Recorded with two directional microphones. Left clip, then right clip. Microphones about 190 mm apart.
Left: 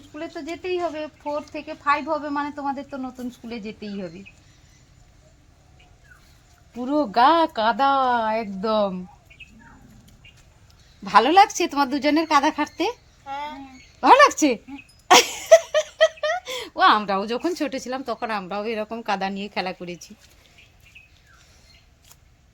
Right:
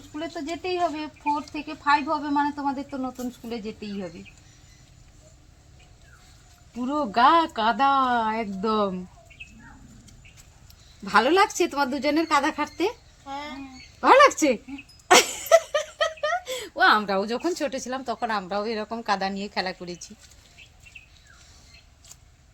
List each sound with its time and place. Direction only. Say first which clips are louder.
0.2 s speech: even; 25° left (ahead or behind); by 3.9 s 45° left (ahead or behind)
6.8 s speech: left 2 dB; 60° left (ahead or behind)
11.0 s speech: left 5 dB; 65° left (ahead or behind)
13.2 s a sound: left 4 dB; 10° left (ahead or behind)
14.0 s speech: left 2 dB; 65° left (ahead or behind); by 20.1 s 50° left (ahead or behind)